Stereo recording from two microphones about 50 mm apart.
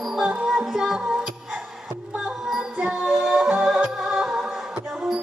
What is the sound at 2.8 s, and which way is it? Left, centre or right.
Music, centre.